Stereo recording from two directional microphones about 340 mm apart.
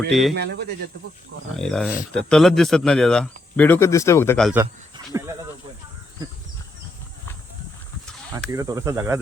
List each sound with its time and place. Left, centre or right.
0.1 s speech: centre
0.3 s speech: right
1.5 s speech: centre
8.4 s cricket: centre